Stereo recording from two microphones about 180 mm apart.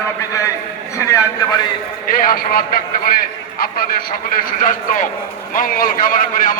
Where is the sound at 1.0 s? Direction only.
20° left (ahead or behind).